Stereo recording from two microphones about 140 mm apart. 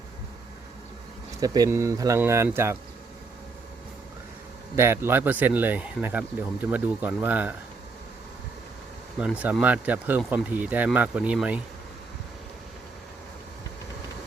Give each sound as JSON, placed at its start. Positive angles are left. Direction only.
{"t": 1.4, "sound": "speech", "side_deg": -25}
{"t": 4.8, "sound": "speech", "side_deg": -15}
{"t": 9.4, "sound": "speech", "side_deg": -10}